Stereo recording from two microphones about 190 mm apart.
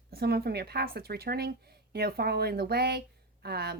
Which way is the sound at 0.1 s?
55° right (ahead or behind).